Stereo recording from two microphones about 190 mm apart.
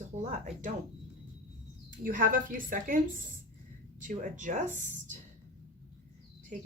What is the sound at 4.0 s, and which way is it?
Speech, 45° right (ahead or behind).